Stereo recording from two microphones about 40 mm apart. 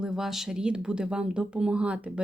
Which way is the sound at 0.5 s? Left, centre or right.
Right.